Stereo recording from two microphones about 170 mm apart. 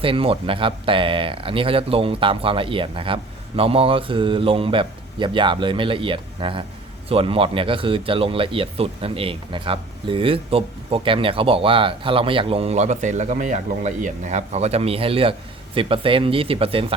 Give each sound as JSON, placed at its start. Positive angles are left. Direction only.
{"t": 0.0, "sound": "speech", "side_deg": -30}